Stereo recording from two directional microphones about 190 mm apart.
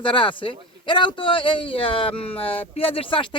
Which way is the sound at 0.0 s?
25° left (ahead or behind).